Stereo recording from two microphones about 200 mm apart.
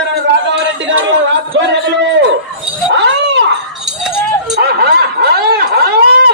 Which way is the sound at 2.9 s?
60° right (ahead or behind).